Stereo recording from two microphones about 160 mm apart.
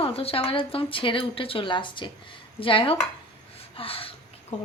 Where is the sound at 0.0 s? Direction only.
35° left (ahead or behind).